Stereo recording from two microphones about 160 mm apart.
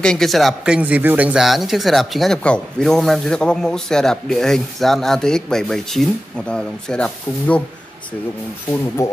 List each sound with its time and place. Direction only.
0.0 s speech: 5° left (ahead or behind)
8.7 s speech: 15° left (ahead or behind)